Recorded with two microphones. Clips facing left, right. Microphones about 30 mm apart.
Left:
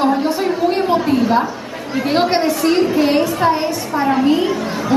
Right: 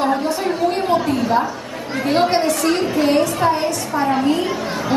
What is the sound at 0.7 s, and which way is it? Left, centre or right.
Chatter, centre.